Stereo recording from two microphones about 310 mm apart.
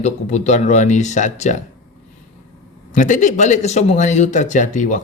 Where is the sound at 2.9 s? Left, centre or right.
Left.